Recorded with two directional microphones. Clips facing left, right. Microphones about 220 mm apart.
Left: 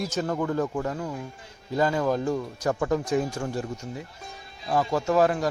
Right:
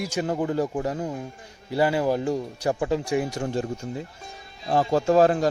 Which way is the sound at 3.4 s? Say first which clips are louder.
Right 3 dB; 25° right (ahead or behind).